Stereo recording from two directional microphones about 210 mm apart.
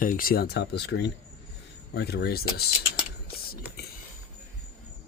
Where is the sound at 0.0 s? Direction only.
40° left (ahead or behind).